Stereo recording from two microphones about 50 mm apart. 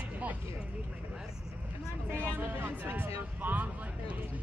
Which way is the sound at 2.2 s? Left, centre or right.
Right.